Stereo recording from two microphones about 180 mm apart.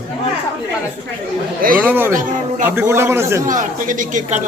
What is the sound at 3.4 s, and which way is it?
Speech, 45° right (ahead or behind).